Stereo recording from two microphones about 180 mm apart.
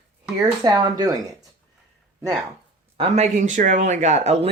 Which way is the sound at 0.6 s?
25° right (ahead or behind).